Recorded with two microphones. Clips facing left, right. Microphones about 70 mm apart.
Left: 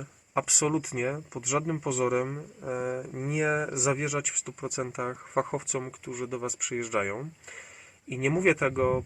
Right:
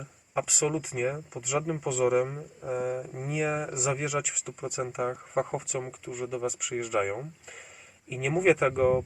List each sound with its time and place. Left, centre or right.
0.6 s speech: centre
7.0 s speech: centre